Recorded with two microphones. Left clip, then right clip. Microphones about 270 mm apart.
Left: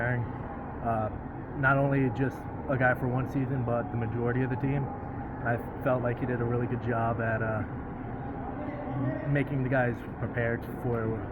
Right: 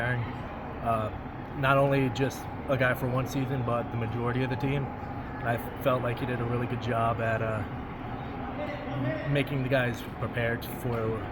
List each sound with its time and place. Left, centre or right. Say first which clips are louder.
1.6 s speech: right 2 dB; right
4.3 s speech: right 1 dB; right
9.3 s speech: right 1 dB; right